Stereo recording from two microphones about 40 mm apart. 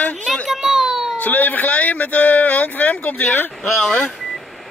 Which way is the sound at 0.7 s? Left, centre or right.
Centre.